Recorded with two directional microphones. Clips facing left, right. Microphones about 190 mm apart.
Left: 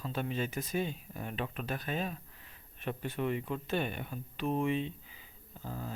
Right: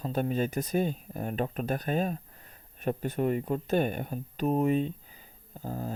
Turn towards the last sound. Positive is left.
turn(degrees=-45)  # may be behind; listen again after turning